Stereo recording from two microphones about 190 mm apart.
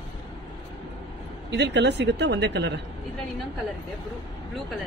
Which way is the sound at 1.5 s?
65° right (ahead or behind).